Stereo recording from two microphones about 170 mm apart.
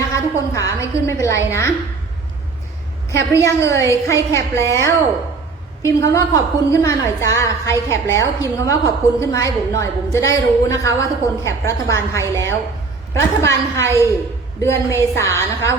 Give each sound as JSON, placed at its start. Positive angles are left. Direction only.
{"t": 0.1, "sound": "a woman's voice", "side_deg": 20}
{"t": 3.1, "sound": "a woman's voice", "side_deg": 15}
{"t": 13.4, "sound": "a woman's voice", "side_deg": 15}